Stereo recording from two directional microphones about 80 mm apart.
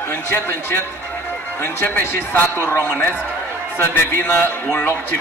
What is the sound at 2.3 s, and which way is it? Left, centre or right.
Speech, left.